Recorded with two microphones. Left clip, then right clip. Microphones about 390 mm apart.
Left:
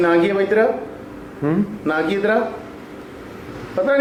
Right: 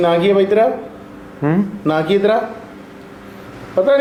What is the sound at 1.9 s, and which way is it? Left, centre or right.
Speech, right.